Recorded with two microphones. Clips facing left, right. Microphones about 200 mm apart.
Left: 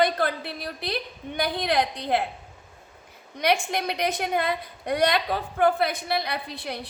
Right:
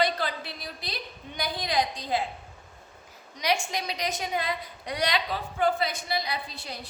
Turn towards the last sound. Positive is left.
turn(degrees=60)  # may be behind; listen again after turning